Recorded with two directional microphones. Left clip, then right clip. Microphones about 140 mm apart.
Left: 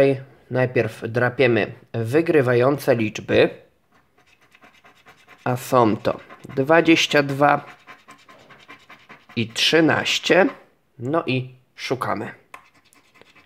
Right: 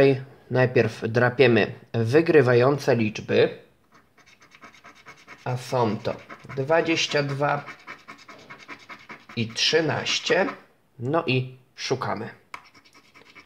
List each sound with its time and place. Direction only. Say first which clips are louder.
0.0 s speech: left 1 dB; 10° left (ahead or behind)
3.1 s speech: left 3 dB; 35° left (ahead or behind)
5.4 s speech: left 7 dB; 55° left (ahead or behind)
9.3 s speech: left 4 dB; 65° left (ahead or behind)
11.0 s speech: left 1 dB; 20° left (ahead or behind)
12.1 s speech: left 4 dB; 40° left (ahead or behind)